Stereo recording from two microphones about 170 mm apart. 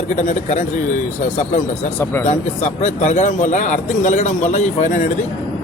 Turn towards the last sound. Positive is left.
turn(degrees=45)  # may be behind; listen again after turning